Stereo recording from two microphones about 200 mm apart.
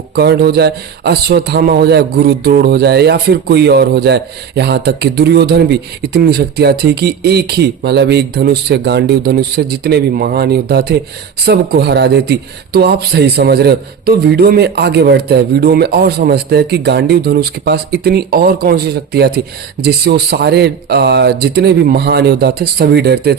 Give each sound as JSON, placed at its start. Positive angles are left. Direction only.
{"t": 0.2, "sound": "speech", "side_deg": -55}